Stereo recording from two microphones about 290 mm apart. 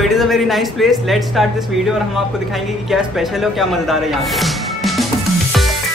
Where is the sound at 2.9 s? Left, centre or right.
Centre.